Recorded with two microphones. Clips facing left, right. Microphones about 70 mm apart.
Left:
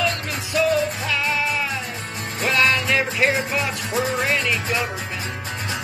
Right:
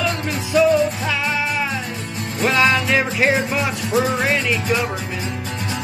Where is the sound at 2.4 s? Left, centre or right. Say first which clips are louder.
Right 3 dB; centre.